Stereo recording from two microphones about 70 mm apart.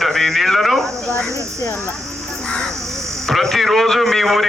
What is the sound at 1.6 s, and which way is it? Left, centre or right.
Speech, left.